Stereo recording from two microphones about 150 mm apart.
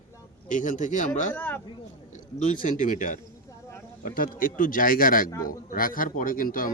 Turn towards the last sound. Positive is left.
turn(degrees=70)  # may be behind; listen again after turning